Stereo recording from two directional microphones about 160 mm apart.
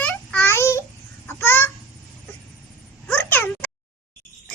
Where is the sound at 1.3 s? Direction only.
15° left (ahead or behind).